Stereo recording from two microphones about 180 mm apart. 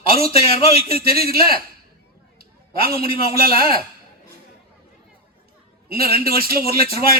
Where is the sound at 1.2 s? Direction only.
55° right (ahead or behind).